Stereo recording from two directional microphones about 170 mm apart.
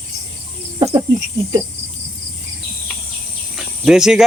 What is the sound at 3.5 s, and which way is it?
Cricket, 5° right (ahead or behind).